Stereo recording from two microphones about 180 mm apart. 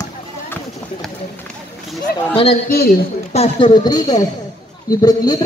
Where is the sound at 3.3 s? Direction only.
30° left (ahead or behind).